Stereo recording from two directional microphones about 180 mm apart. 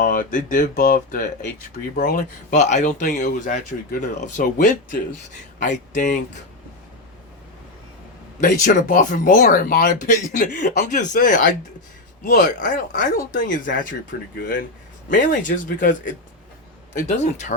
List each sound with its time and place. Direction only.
0.0 s speech: 50° left (ahead or behind)
8.4 s speech: 45° left (ahead or behind)